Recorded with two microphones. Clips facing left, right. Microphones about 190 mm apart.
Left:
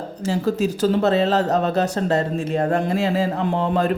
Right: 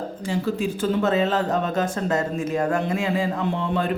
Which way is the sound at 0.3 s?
40° left (ahead or behind).